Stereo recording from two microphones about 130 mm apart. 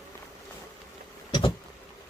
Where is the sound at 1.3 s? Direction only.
35° left (ahead or behind).